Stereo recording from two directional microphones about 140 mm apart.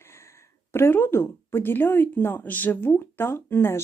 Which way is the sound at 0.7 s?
15° left (ahead or behind).